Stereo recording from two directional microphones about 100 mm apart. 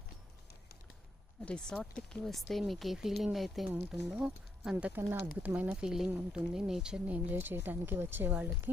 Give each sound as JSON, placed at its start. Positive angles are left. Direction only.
{"t": 1.4, "sound": "speech", "side_deg": 10}